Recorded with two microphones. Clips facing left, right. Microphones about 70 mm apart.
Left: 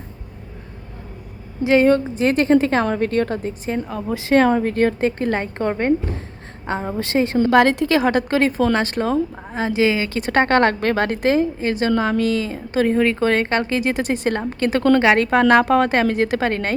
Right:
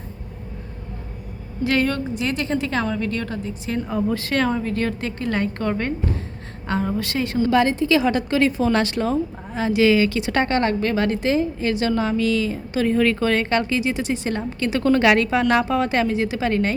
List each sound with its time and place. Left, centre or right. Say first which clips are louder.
1.6 s a woman's voice: left 7 dB; left
2.1 s speech: left 8 dB; left
4.1 s a woman's voice: left 10 dB; left
4.4 s a woman's voice: left 6 dB; left
7.3 s a woman's voice: left 3 dB; left
7.9 s a woman's voice: left 1 dB; left
9.3 s a woman's voice: even; left
10.2 s speech: left 3 dB; left
10.5 s a woman's voice: left 4 dB; left
12.3 s speech: even; left
14.9 s speech: right 1 dB; left
15.3 s a woman's voice: left 5 dB; left